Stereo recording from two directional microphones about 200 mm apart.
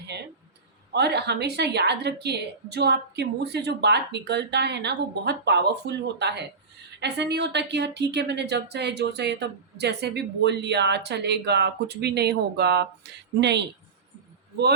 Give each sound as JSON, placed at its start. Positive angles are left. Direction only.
{"t": 0.9, "sound": "a woman's voice", "side_deg": -55}